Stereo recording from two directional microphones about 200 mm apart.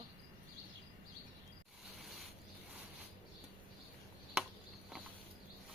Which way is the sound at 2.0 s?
Centre (ahead or behind).